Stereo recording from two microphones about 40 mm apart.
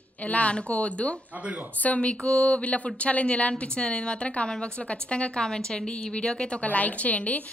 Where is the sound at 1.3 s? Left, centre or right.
Right.